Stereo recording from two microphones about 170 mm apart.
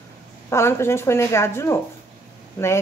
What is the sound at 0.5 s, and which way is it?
Speech, 15° left (ahead or behind).